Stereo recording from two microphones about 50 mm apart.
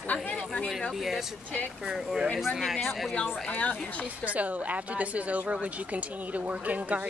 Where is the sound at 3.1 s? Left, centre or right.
Left.